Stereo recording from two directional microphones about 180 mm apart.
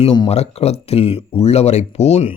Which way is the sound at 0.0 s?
30° left (ahead or behind).